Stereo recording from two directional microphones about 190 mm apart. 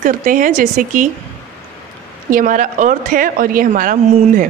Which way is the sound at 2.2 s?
45° right (ahead or behind).